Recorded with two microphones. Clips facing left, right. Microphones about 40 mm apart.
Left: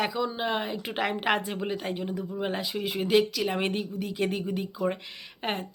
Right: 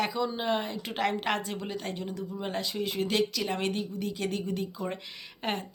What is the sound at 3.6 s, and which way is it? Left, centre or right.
Speech, left.